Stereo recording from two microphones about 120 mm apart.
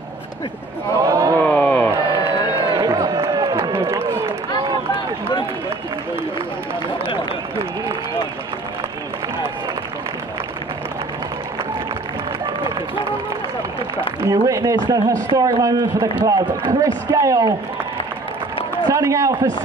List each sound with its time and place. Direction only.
1.0 s speech: 25° right (ahead or behind)
1.4 s a sound: 15° left (ahead or behind)
1.9 s a sound: 30° right (ahead or behind)
2.6 s run: 35° right (ahead or behind)
14.2 s speech: 30° right (ahead or behind)
18.9 s speech: 25° right (ahead or behind)